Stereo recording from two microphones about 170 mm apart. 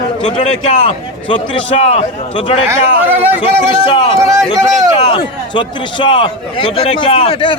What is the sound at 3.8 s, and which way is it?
A man's voice, 30° left (ahead or behind).